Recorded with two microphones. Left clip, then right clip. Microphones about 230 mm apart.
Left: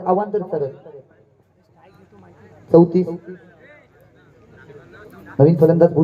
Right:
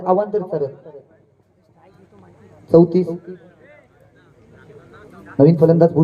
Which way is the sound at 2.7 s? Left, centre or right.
Right.